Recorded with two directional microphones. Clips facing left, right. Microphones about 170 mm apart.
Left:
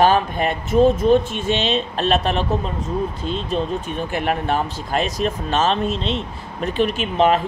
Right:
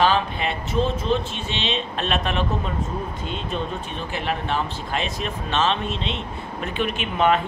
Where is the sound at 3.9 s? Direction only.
50° left (ahead or behind).